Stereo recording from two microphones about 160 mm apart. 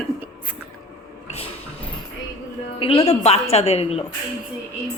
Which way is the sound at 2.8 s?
35° left (ahead or behind).